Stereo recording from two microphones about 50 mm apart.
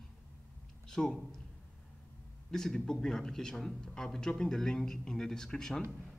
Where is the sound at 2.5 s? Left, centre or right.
Centre.